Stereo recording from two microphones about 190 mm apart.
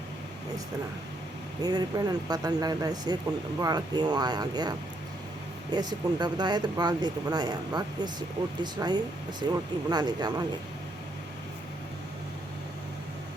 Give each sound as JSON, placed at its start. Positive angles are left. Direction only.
{"t": 1.6, "sound": "speech", "side_deg": -20}
{"t": 5.7, "sound": "speech", "side_deg": -20}